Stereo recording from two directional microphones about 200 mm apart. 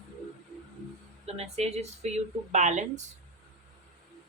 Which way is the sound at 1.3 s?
30° right (ahead or behind).